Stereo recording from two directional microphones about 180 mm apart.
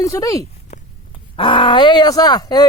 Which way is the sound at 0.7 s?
45° left (ahead or behind).